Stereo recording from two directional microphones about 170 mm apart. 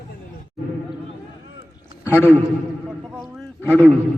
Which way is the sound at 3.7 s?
10° left (ahead or behind).